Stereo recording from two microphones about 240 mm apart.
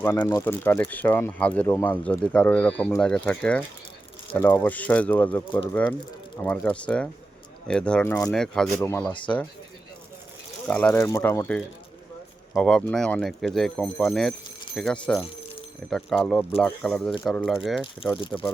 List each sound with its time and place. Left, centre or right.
0.0 s speech: centre
6.4 s speech: centre
10.7 s speech: centre
18.1 s speech: left